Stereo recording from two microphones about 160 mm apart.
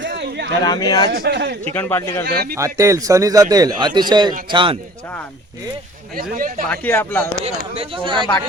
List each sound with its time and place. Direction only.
0.1 s a sound: 90° right
0.6 s speech: 25° left (ahead or behind)
1.1 s a man's voice: 85° right
1.7 s speech: 15° left (ahead or behind)
2.2 s speech: 75° right (ahead or behind)
2.6 s a man's voice: 20° right (ahead or behind)
6.3 s speech: 60° right (ahead or behind)
6.7 s speech: 15° left (ahead or behind)
7.6 s speech: 30° right (ahead or behind)